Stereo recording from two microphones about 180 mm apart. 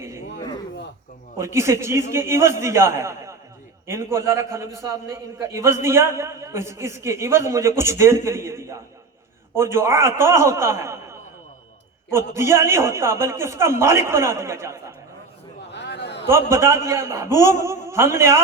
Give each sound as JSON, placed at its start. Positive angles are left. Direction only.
{"t": 1.4, "sound": "a man's voice", "side_deg": -15}
{"t": 15.7, "sound": "a sound", "side_deg": 70}
{"t": 16.2, "sound": "a man's voice", "side_deg": -15}